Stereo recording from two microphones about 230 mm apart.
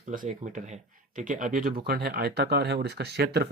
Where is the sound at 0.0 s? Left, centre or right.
Right.